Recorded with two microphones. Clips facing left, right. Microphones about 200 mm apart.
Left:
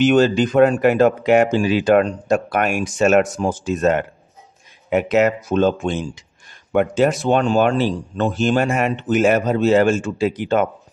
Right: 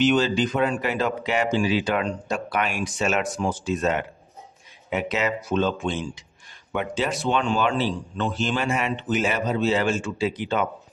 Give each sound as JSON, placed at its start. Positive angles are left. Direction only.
{"t": 0.0, "sound": "speech", "side_deg": 50}